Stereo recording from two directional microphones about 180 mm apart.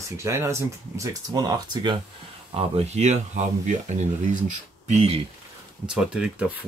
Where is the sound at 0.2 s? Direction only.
15° right (ahead or behind); by 5.2 s 35° right (ahead or behind).